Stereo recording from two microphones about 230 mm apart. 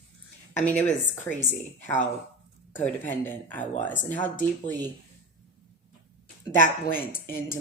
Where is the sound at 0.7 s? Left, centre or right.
Centre.